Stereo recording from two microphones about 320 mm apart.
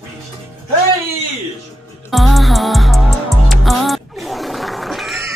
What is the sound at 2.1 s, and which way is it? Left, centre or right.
Music, centre.